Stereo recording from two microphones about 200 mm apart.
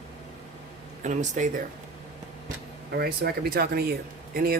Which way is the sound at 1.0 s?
40° right (ahead or behind).